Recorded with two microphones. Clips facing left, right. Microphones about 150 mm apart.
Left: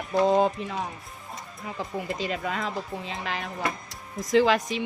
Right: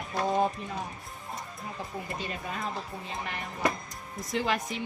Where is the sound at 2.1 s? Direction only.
90° left.